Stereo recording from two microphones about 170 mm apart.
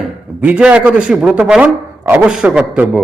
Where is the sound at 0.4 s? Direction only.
5° right (ahead or behind).